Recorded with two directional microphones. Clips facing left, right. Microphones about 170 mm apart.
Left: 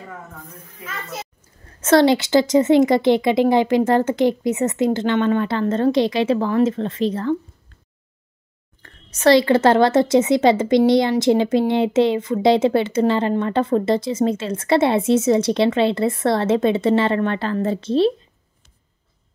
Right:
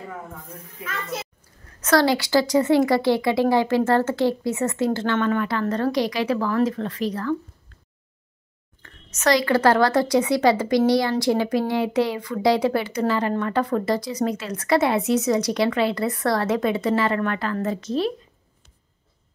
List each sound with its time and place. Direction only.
1.4 s a woman's voice: 25° left (ahead or behind)
8.8 s a woman's voice: 30° left (ahead or behind)